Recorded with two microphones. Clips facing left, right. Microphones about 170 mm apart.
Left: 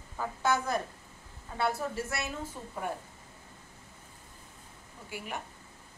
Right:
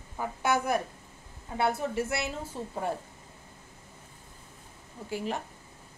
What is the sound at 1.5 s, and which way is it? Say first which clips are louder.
Speech: right 3 dB; 20° right (ahead or behind).